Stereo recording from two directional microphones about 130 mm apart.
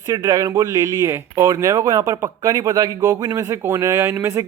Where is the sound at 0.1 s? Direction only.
25° right (ahead or behind).